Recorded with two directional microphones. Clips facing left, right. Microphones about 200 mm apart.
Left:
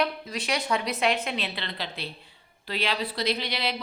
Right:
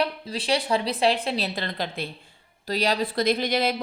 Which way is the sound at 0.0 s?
30° right (ahead or behind).